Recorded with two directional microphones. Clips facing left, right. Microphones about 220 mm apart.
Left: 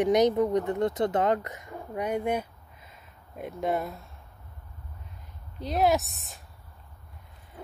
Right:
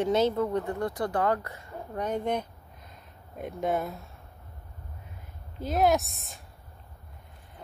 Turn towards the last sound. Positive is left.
turn(degrees=0)  # may be behind; listen again after turning